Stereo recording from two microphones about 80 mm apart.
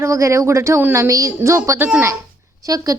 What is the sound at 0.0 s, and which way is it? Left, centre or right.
A woman's voice, right.